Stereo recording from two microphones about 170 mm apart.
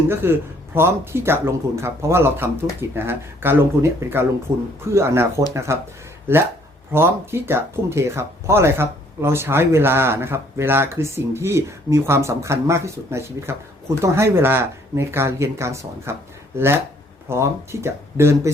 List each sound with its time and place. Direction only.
0.1 s speech: 15° right (ahead or behind)
6.9 s speech: 15° right (ahead or behind)